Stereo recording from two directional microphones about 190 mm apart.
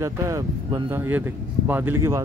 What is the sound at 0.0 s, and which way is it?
Speech, 15° right (ahead or behind).